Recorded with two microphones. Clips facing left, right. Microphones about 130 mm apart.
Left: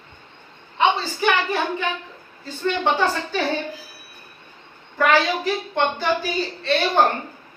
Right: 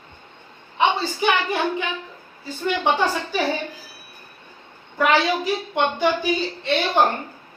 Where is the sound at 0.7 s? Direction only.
15° right (ahead or behind).